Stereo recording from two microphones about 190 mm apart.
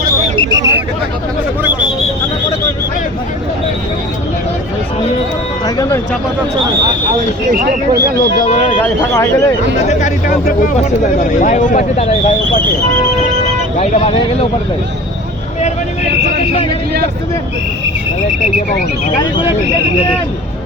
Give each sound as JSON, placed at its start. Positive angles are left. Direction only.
{"t": 0.3, "sound": "a sound", "side_deg": -20}
{"t": 5.6, "sound": "speech", "side_deg": 20}
{"t": 7.5, "sound": "speech", "side_deg": -60}
{"t": 8.8, "sound": "speech", "side_deg": 15}
{"t": 10.0, "sound": "speech", "side_deg": 45}
{"t": 13.7, "sound": "speech", "side_deg": 30}